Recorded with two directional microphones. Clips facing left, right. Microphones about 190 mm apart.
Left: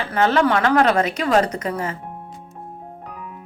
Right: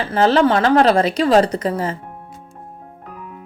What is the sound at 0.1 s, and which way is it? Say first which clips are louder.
Speech: right 3 dB; 30° right (ahead or behind).